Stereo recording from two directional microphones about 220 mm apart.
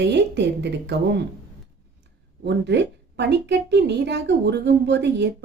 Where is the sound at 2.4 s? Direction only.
50° right (ahead or behind).